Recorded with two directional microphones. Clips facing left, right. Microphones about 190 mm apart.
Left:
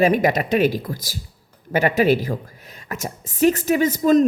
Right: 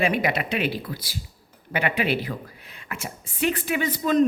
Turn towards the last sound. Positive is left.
turn(degrees=45)  # may be behind; listen again after turning